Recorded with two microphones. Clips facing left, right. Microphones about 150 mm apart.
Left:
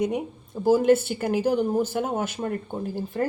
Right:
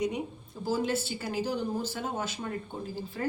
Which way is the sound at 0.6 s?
50° left (ahead or behind).